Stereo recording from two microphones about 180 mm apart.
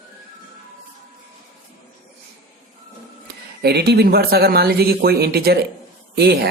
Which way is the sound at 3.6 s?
65° right (ahead or behind).